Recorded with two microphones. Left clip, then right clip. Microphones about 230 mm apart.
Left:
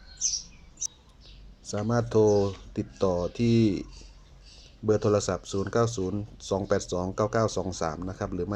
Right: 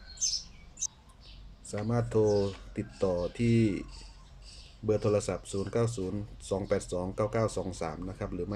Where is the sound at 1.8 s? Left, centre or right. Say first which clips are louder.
Left 5 dB; left.